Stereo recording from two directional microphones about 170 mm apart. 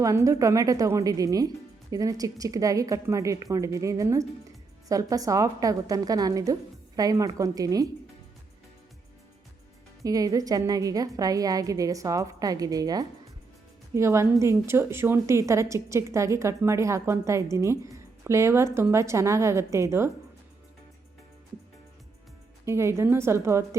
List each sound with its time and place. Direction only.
0.0 s a woman's voice: 20° right (ahead or behind)
10.0 s a woman's voice: 20° right (ahead or behind)
22.6 s a woman's voice: 15° right (ahead or behind)